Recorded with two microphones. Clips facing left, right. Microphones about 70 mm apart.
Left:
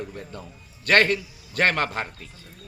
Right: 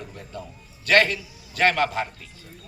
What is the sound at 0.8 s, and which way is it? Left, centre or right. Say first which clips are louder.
A man's voice: even; left.